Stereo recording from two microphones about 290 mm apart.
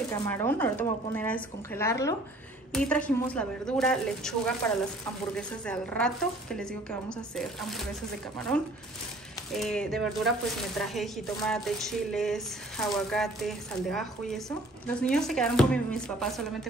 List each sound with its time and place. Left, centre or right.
0.1 s speech: centre
9.5 s speech: centre